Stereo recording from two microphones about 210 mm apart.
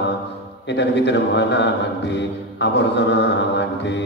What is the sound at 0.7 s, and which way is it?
A man's voice, 55° left (ahead or behind).